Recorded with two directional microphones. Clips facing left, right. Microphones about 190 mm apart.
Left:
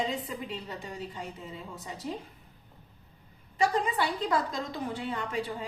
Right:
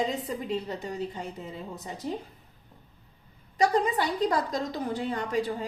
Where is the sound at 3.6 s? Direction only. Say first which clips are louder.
Right 3 dB; 40° right (ahead or behind).